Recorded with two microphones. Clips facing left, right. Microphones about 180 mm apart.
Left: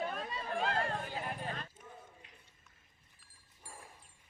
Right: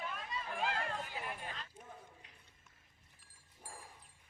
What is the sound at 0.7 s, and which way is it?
Clip-clop, 40° left (ahead or behind).